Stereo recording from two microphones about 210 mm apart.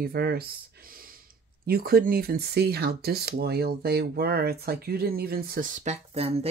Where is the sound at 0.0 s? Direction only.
50° right (ahead or behind).